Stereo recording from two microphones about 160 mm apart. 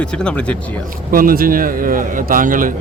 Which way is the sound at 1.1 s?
60° right (ahead or behind).